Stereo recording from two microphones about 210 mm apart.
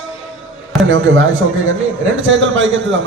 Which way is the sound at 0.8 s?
70° right (ahead or behind).